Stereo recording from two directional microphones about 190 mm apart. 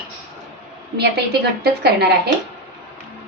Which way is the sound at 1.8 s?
60° right (ahead or behind).